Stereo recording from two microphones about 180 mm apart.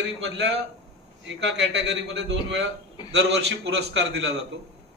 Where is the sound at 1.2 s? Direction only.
75° right (ahead or behind).